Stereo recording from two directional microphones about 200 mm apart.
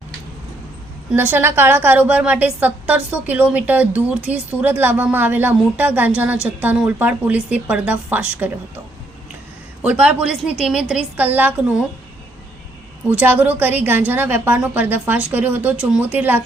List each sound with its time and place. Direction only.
1.1 s a woman's voice: 10° right (ahead or behind)
9.9 s a woman's voice: 5° right (ahead or behind)
10.4 s a woman's voice: 30° left (ahead or behind)
10.7 s a woman's voice: 5° right (ahead or behind)
13.1 s a woman's voice: 10° right (ahead or behind)